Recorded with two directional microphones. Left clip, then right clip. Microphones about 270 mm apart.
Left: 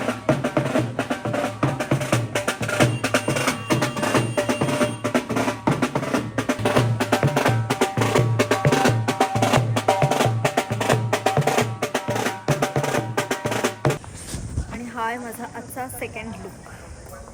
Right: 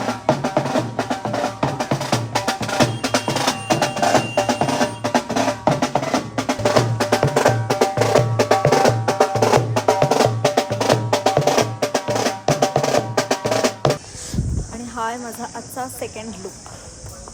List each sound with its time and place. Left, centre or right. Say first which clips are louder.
0.0 s music: right 3 dB; right
14.9 s snake: right 2 dB; centre